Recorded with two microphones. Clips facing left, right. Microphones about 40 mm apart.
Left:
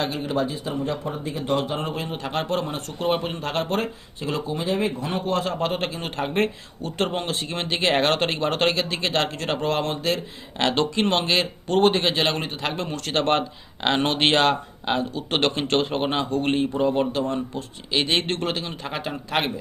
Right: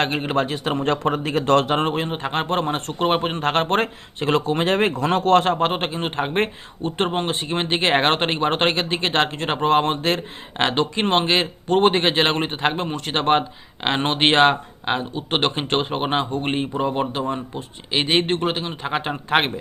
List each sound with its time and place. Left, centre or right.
0.0 s speech: right
1.7 s a man's voice: right